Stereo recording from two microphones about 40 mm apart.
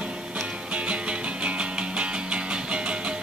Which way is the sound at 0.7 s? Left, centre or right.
Right.